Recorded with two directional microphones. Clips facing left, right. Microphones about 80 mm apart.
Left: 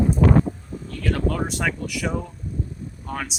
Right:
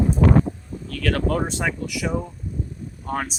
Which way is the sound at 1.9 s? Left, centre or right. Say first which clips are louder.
Right 1 dB; centre.